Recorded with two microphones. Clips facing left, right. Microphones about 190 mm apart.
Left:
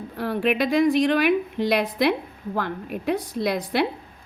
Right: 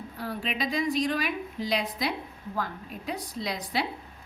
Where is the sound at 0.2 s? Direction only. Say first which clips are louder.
Left 10 dB; 65° left (ahead or behind).